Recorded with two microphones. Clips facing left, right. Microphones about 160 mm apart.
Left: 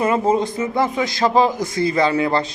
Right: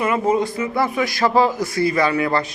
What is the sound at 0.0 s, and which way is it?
A man's voice, 30° left (ahead or behind).